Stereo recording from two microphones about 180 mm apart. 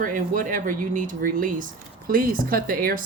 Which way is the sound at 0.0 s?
45° right (ahead or behind).